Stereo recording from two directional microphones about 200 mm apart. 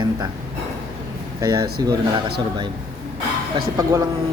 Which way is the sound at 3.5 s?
15° right (ahead or behind).